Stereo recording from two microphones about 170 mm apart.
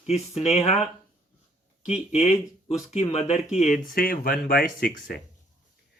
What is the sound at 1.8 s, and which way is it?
Speech, 40° left (ahead or behind).